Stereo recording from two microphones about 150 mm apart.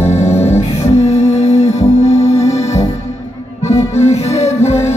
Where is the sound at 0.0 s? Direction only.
45° left (ahead or behind).